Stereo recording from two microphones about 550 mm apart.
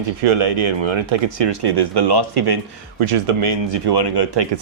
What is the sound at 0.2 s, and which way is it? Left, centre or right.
Speech, right.